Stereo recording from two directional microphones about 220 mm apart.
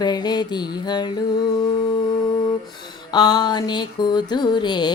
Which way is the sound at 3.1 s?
20° left (ahead or behind).